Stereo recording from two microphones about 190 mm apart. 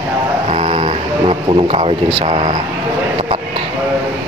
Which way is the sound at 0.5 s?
30° right (ahead or behind).